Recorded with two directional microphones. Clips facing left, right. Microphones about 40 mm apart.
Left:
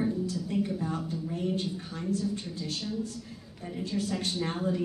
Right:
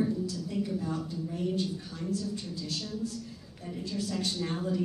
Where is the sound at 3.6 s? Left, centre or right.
Centre.